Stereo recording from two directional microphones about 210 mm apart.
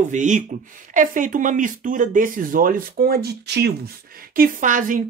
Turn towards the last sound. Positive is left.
turn(degrees=-40)  # may be behind; listen again after turning